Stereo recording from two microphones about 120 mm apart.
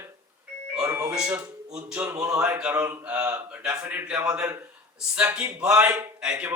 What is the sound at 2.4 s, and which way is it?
Speech, 10° right (ahead or behind).